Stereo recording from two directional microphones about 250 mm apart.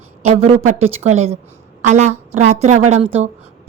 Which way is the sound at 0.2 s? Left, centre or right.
Right.